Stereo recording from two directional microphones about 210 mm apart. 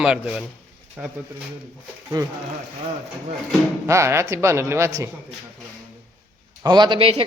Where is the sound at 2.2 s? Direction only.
20° right (ahead or behind).